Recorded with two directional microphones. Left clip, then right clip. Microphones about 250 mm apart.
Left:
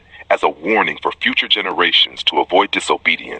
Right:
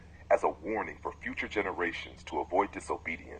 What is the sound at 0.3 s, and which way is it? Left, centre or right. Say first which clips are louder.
Speech: left 13 dB; left.